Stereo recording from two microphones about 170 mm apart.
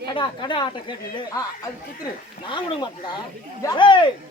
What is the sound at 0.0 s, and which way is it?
Speech, 25° left (ahead or behind).